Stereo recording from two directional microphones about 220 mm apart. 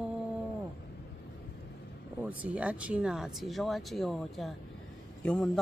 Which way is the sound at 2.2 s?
5° right (ahead or behind).